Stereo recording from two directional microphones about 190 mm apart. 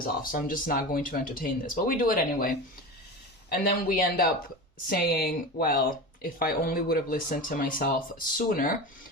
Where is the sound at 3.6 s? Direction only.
50° left (ahead or behind).